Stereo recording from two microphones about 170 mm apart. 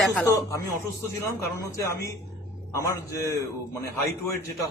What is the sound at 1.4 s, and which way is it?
A woman's voice, 15° left (ahead or behind).